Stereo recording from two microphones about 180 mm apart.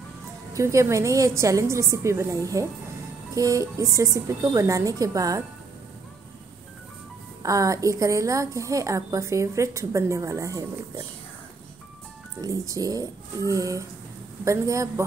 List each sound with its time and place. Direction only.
0.5 s a woman's voice: 15° right (ahead or behind)
7.4 s a woman's voice: 20° right (ahead or behind)
12.4 s a woman's voice: 20° right (ahead or behind)